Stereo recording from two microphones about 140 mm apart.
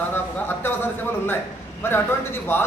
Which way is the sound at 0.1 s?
15° left (ahead or behind).